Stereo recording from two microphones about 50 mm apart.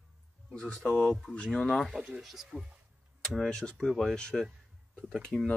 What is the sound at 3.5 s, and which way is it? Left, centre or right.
Speech, centre.